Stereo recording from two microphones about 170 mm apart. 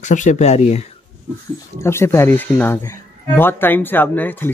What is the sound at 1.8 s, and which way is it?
Speech, 15° left (ahead or behind).